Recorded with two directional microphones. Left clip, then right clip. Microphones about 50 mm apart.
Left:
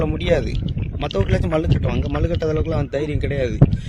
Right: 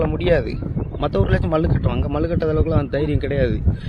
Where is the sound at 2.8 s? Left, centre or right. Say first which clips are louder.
Right 2 dB; centre.